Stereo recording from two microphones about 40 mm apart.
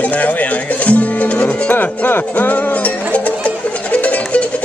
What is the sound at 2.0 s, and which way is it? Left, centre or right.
Music, left.